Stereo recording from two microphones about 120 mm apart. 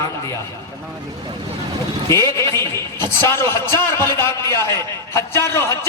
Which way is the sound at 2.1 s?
25° left (ahead or behind).